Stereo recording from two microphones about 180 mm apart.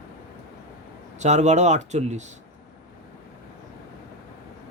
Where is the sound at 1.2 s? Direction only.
40° right (ahead or behind).